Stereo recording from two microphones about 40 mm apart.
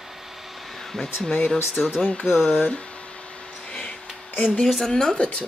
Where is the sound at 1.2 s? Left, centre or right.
Centre.